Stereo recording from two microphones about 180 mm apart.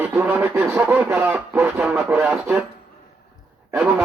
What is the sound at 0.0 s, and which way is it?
Speech, 10° right (ahead or behind).